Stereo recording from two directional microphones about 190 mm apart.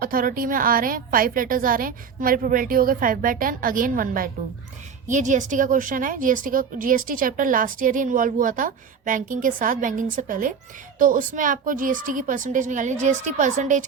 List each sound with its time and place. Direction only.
0.0 s speech: 50° right (ahead or behind)